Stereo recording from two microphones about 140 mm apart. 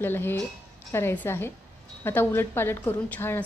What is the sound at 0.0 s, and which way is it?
A woman's voice, 15° left (ahead or behind).